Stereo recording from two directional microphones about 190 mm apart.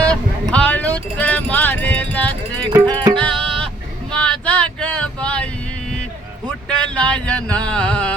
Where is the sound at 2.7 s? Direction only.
20° right (ahead or behind).